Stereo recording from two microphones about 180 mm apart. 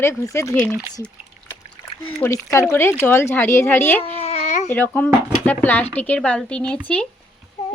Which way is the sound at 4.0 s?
35° left (ahead or behind).